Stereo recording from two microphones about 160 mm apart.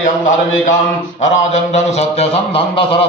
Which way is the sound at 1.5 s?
45° left (ahead or behind).